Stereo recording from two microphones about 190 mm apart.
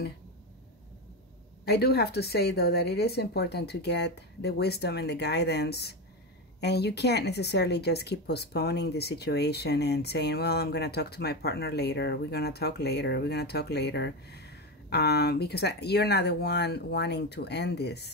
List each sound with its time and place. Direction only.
1.6 s speech: 55° left (ahead or behind)